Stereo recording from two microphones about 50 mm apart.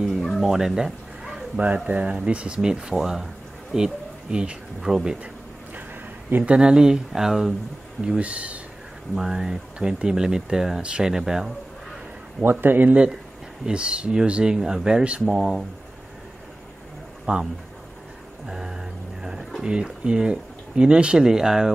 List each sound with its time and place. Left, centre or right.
0.0 s a sound: centre
1.9 s speech: right; by 5.1 s centre
6.4 s speech: right
8.0 s speech: right
9.1 s speech: centre
12.4 s speech: right
13.7 s speech: right
17.3 s speech: right
18.5 s a sound: centre
19.6 s speech: centre